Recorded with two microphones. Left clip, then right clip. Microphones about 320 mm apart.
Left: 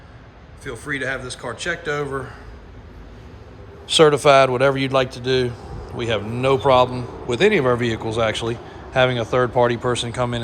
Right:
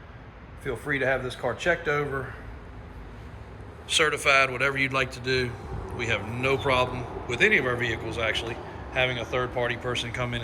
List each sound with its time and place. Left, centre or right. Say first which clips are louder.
0.6 s speech: left 1 dB; centre
3.8 s a man's voice: left 9 dB; centre